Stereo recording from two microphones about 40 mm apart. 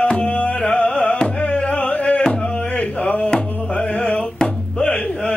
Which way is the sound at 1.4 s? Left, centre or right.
Left.